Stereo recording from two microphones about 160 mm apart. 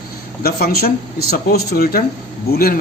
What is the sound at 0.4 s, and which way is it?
Speech, 75° left (ahead or behind).